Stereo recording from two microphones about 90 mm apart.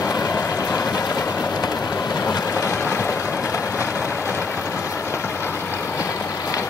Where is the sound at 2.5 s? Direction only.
35° left (ahead or behind).